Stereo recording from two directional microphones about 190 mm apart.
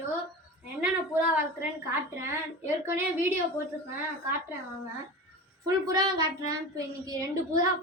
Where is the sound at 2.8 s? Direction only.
15° right (ahead or behind).